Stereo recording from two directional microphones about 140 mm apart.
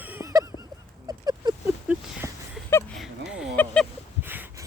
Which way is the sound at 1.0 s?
30° right (ahead or behind).